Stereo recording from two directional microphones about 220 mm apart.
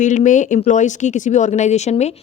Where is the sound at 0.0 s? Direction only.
35° left (ahead or behind).